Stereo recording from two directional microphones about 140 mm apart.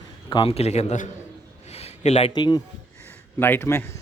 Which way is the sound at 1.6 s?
50° left (ahead or behind).